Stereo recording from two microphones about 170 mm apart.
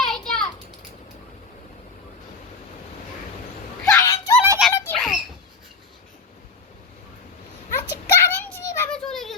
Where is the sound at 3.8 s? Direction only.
15° left (ahead or behind).